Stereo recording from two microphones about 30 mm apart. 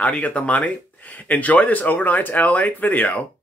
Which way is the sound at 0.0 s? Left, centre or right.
Left.